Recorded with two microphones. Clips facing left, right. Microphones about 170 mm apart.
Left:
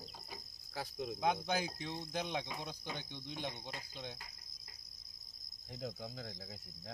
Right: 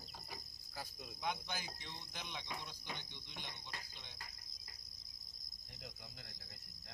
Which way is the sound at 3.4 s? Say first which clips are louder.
Left 9 dB; 55° left (ahead or behind).